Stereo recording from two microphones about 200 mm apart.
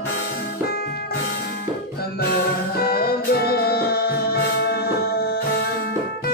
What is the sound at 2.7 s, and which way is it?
Music, 50° left (ahead or behind).